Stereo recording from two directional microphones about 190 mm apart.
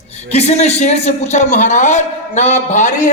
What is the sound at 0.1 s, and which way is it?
A man's voice, 35° left (ahead or behind).